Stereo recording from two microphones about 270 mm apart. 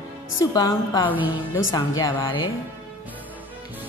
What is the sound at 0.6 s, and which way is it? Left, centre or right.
Speech, centre.